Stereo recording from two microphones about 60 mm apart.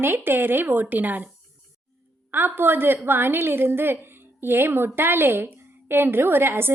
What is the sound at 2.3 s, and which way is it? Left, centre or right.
A woman's voice, right.